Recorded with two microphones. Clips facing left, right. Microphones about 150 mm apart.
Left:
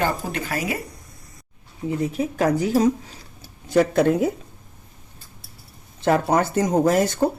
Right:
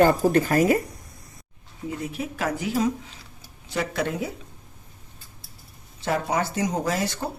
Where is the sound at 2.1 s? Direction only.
40° left (ahead or behind).